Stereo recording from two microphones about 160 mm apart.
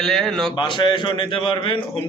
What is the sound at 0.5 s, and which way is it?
A man's voice, 30° left (ahead or behind).